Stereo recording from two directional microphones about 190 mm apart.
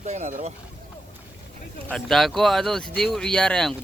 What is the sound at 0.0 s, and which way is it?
Speech, 40° right (ahead or behind).